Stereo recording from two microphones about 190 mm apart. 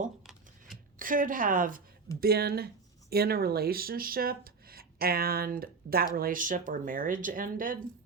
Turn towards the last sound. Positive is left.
turn(degrees=-45)  # may be behind; listen again after turning